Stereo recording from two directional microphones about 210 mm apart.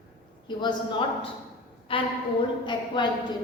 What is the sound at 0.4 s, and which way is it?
A woman's voice, 20° left (ahead or behind).